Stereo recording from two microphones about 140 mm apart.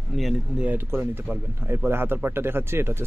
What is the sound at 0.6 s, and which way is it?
Speech, 15° right (ahead or behind).